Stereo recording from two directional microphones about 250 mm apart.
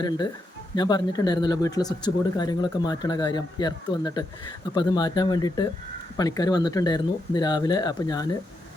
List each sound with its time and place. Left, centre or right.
0.8 s speech: centre